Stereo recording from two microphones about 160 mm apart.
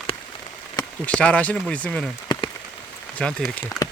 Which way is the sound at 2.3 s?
25° left (ahead or behind).